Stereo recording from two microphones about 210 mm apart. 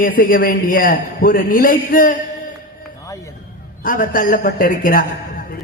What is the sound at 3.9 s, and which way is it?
A man's voice, 40° left (ahead or behind).